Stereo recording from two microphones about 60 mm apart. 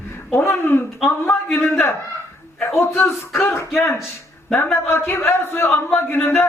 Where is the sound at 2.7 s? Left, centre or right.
Left.